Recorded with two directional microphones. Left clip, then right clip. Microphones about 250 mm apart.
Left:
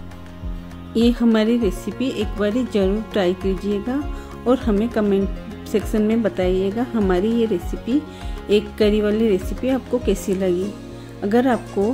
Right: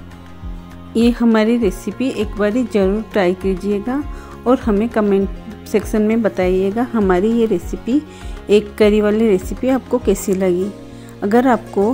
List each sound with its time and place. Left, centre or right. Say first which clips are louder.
0.9 s speech: right 3 dB; centre